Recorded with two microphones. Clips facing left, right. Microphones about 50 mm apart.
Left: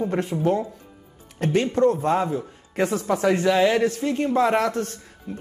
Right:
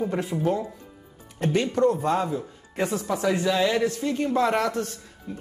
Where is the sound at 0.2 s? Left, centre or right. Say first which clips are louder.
Left 3 dB; left.